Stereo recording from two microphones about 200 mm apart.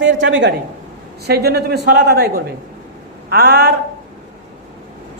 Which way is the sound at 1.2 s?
55° right (ahead or behind).